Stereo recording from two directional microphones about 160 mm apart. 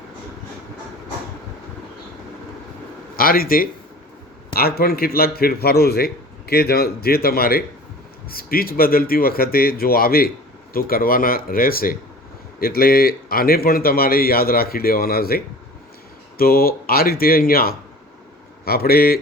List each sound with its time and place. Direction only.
3.2 s a man's voice: 65° left (ahead or behind)